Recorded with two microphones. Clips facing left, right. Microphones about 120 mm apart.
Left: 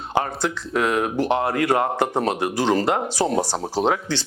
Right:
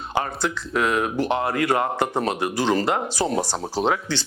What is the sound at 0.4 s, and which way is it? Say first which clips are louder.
Speech: left 1 dB; 45° left (ahead or behind).